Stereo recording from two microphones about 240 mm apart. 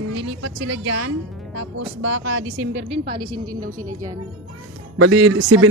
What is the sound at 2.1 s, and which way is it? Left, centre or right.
Speech, right.